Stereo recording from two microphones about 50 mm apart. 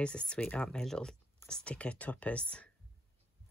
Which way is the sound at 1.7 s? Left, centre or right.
Left.